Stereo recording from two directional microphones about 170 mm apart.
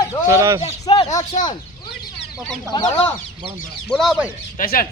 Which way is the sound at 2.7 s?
25° left (ahead or behind).